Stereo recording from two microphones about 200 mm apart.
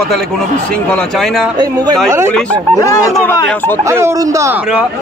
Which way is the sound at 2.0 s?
10° right (ahead or behind).